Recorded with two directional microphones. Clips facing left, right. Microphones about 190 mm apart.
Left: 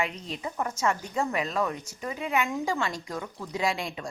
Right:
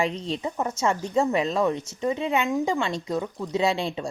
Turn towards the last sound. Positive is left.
turn(degrees=-30)  # may be behind; listen again after turning